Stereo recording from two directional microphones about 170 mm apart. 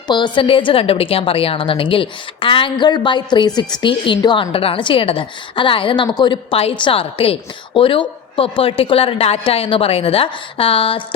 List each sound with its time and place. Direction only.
0.1 s a woman's voice: 30° left (ahead or behind)